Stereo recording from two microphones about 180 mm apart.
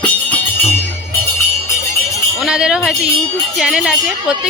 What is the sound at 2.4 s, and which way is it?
Speech, 5° right (ahead or behind).